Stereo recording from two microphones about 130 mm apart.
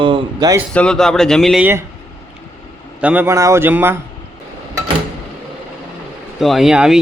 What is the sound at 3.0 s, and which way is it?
Speech, 15° right (ahead or behind).